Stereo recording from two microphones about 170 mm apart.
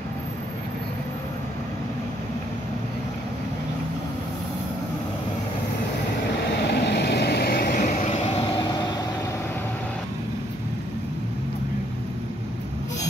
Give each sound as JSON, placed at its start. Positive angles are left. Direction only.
{"t": 6.6, "sound": "vehicle", "side_deg": 85}